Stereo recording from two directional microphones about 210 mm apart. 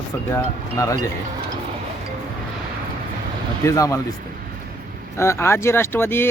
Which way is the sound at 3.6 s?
15° left (ahead or behind).